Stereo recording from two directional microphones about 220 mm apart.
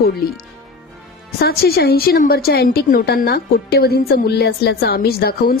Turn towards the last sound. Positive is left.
turn(degrees=45)  # may be behind; listen again after turning